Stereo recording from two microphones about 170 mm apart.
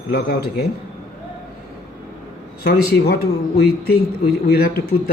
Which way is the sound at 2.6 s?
65° left (ahead or behind).